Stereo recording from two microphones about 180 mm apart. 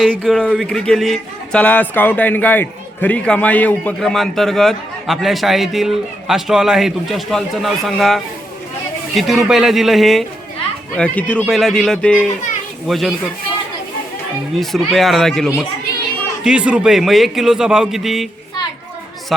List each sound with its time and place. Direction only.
0.1 s speech: 10° right (ahead or behind)
0.3 s a man's voice: 5° left (ahead or behind)
14.6 s a man's voice: centre (ahead or behind)